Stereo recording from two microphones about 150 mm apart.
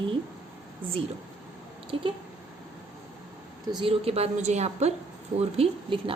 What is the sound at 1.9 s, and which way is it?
Speech, 40° right (ahead or behind).